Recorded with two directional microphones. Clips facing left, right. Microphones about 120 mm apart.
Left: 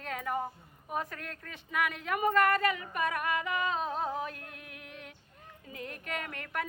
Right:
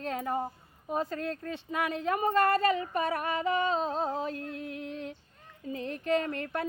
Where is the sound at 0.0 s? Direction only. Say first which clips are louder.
Right 3 dB; 30° right (ahead or behind).